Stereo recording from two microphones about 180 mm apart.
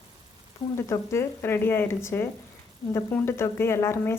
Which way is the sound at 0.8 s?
15° left (ahead or behind).